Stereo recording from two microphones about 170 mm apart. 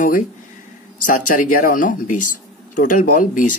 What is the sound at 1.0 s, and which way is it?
Speech, 50° left (ahead or behind).